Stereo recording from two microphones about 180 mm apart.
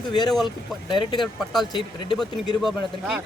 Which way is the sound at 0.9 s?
25° left (ahead or behind).